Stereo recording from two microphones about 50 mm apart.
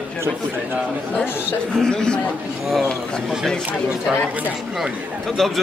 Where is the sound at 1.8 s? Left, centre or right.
Centre.